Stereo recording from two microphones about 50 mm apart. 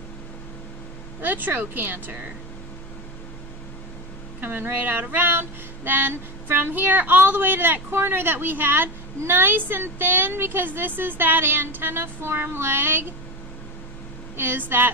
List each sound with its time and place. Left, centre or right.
1.2 s speech: right
4.4 s a sound: right
14.3 s a woman's voice: right